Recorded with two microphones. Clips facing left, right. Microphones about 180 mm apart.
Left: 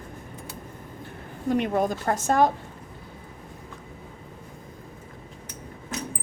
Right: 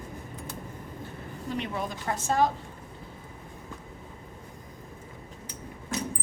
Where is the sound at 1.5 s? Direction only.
50° left (ahead or behind).